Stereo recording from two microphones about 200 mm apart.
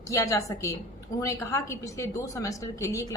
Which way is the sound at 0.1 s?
15° left (ahead or behind).